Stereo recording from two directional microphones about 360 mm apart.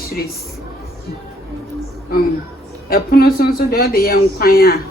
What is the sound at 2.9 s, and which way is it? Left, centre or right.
Speech, left.